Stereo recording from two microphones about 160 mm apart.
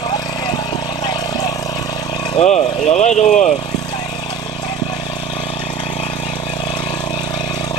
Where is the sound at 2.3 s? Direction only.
40° left (ahead or behind).